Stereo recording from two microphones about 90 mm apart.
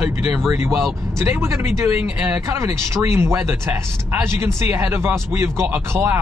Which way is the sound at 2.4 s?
35° right (ahead or behind).